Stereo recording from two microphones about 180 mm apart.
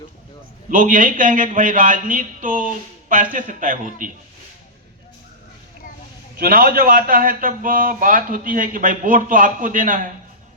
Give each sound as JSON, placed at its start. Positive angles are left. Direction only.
{"t": 0.7, "sound": "a man's voice", "side_deg": -50}
{"t": 6.4, "sound": "a man's voice", "side_deg": -55}